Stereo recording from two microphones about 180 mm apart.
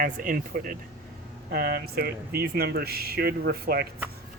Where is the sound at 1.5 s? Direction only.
65° right (ahead or behind).